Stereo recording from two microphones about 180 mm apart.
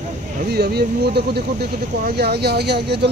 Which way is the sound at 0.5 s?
65° right (ahead or behind).